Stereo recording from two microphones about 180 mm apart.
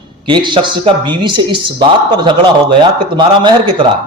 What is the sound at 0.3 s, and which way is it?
A man's voice, 25° right (ahead or behind).